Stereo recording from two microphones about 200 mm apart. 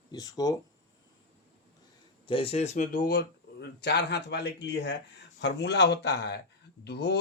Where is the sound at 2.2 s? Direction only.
25° left (ahead or behind).